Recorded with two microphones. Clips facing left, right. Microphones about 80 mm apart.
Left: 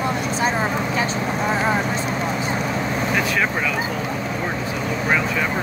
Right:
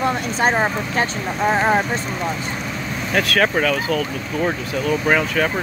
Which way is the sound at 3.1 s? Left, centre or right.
Right.